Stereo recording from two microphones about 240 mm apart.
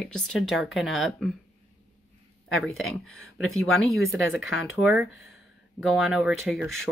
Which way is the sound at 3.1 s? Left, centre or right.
Left.